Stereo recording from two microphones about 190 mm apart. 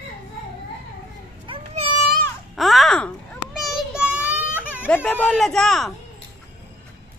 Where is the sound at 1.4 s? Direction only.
30° right (ahead or behind).